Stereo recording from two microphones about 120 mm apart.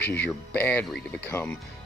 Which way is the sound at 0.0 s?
15° left (ahead or behind).